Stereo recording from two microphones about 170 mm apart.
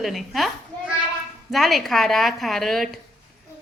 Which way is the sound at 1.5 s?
Centre (ahead or behind).